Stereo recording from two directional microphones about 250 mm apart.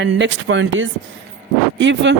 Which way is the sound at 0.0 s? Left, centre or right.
Right.